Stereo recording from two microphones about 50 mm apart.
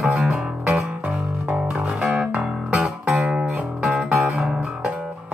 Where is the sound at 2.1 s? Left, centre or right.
Right.